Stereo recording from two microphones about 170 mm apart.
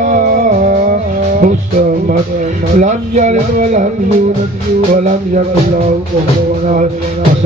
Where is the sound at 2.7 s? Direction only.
45° right (ahead or behind).